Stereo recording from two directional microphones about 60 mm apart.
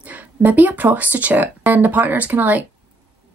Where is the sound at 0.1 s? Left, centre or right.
Right.